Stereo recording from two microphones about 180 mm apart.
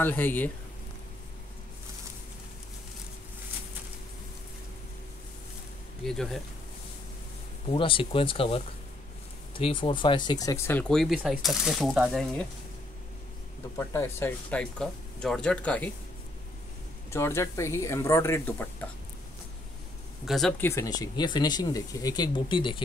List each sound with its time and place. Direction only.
0.0 s speech: 10° left (ahead or behind)
6.0 s speech: centre (ahead or behind)
7.7 s speech: 30° left (ahead or behind); by 12.4 s 5° left (ahead or behind)
13.7 s speech: 15° left (ahead or behind)
17.1 s speech: 15° left (ahead or behind)
20.2 s speech: centre (ahead or behind); by 22.8 s 25° left (ahead or behind)